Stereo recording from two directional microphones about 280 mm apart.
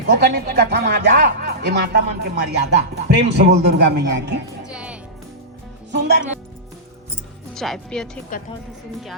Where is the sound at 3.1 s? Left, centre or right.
Right.